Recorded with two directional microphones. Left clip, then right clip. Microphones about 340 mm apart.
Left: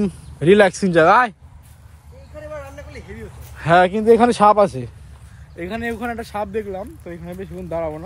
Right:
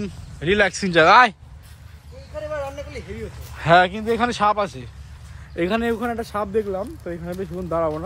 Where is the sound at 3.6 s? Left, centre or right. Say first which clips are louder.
Left 1 dB; centre.